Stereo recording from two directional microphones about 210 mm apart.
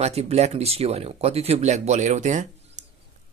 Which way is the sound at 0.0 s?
30° right (ahead or behind).